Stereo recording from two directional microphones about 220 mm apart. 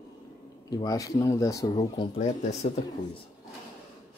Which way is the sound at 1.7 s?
25° left (ahead or behind).